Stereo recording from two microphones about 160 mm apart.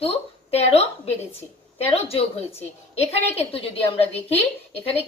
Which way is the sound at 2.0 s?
40° left (ahead or behind).